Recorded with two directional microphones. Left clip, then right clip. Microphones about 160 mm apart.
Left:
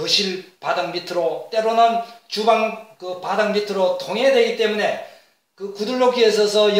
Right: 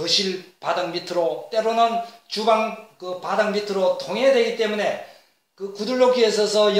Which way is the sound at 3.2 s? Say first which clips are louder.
Left 2 dB; 20° right (ahead or behind).